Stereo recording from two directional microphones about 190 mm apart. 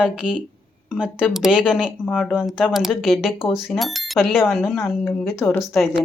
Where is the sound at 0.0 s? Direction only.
5° right (ahead or behind).